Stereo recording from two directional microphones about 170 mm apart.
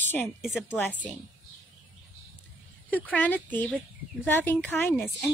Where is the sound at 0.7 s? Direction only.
10° left (ahead or behind).